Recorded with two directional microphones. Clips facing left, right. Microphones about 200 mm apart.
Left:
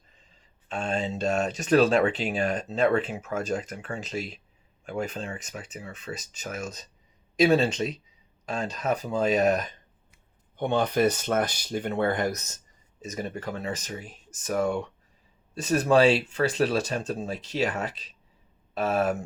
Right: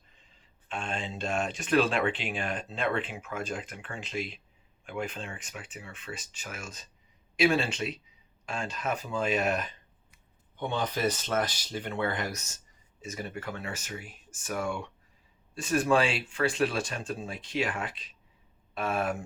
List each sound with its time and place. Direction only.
0.7 s speech: 40° left (ahead or behind)
10.8 s speech: 60° left (ahead or behind)
11.3 s speech: 45° left (ahead or behind)